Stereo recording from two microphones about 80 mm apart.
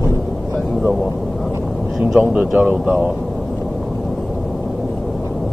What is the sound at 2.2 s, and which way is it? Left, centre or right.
Speech, centre.